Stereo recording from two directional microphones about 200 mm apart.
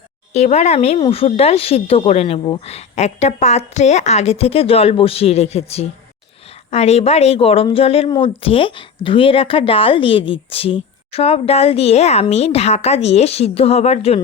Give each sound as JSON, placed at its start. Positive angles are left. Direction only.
{"t": 0.3, "sound": "a woman's voice", "side_deg": 35}